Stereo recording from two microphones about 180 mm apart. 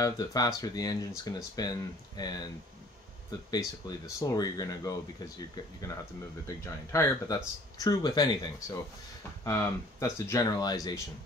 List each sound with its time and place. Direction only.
0.0 s speech: 20° left (ahead or behind)
6.4 s speech: 15° left (ahead or behind)
9.4 s speech: 15° left (ahead or behind)